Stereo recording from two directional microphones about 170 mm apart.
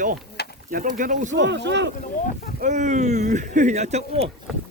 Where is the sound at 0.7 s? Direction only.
55° right (ahead or behind).